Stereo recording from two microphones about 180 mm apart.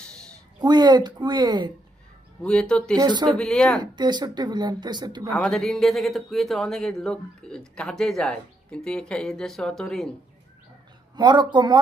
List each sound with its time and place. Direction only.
0.6 s speech: 25° right (ahead or behind)
2.4 s speech: 5° left (ahead or behind)
3.0 s speech: 25° right (ahead or behind)
3.3 s speech: 5° left (ahead or behind)
3.8 s speech: 25° right (ahead or behind)
5.3 s speech: 5° left (ahead or behind)
11.2 s speech: 25° right (ahead or behind)